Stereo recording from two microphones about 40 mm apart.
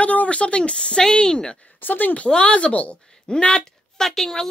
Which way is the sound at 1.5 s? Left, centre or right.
Left.